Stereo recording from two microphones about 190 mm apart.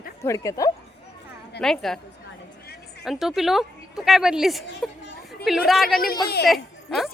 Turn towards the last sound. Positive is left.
turn(degrees=0)  # may be behind; listen again after turning